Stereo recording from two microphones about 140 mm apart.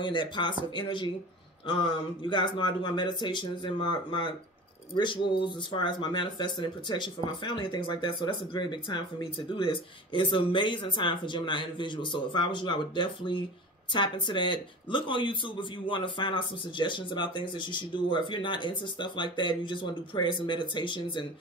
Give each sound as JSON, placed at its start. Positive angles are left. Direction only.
{"t": 0.0, "sound": "speech", "side_deg": 35}